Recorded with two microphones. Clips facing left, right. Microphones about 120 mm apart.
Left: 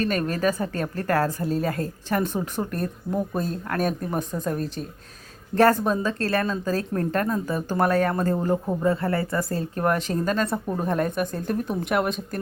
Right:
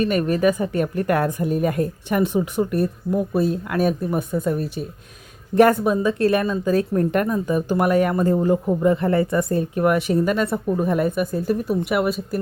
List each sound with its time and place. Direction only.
0.0 s a woman's voice: 15° right (ahead or behind)